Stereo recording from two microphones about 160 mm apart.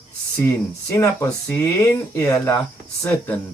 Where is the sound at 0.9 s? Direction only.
20° left (ahead or behind).